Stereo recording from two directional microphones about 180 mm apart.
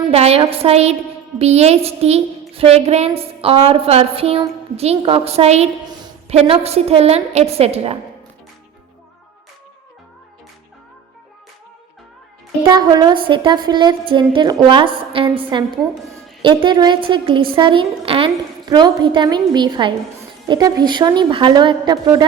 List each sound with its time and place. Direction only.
0.1 s a woman's voice: 35° right (ahead or behind)
12.6 s a woman's voice: 25° right (ahead or behind)
16.6 s a woman's voice: 25° right (ahead or behind)